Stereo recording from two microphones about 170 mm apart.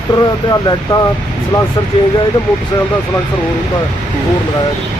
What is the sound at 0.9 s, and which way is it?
Speech, 20° left (ahead or behind).